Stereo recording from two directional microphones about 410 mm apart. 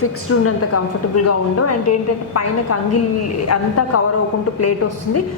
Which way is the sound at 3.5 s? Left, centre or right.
Left.